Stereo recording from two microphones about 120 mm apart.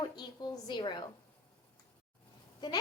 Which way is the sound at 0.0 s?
35° left (ahead or behind).